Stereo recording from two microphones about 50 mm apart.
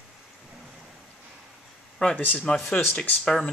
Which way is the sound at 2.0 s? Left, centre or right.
Centre.